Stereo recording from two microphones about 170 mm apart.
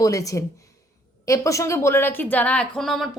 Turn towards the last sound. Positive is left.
turn(degrees=0)  # may be behind; listen again after turning